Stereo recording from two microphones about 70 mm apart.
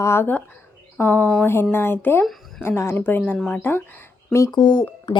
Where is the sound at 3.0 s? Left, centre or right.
Left.